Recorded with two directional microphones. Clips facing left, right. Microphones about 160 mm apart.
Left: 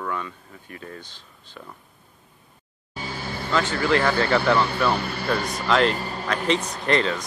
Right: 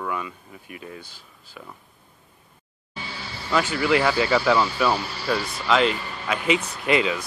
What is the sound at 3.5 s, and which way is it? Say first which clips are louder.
Speech: right 1 dB; 10° right (ahead or behind).